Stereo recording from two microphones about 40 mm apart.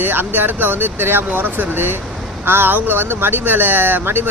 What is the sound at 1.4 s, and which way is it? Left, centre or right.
Speech, right.